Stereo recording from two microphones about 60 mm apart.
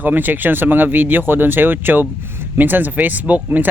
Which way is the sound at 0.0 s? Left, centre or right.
Right.